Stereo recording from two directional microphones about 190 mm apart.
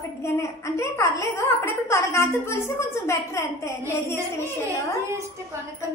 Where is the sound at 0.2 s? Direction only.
15° left (ahead or behind).